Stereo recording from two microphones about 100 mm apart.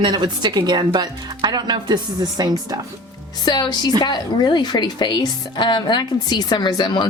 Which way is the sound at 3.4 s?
45° left (ahead or behind).